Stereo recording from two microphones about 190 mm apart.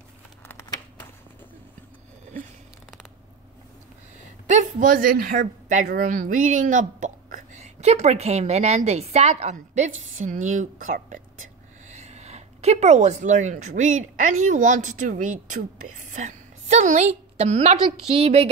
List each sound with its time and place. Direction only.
0.5 s crumpling: 15° left (ahead or behind)
4.5 s a woman's voice: 40° right (ahead or behind)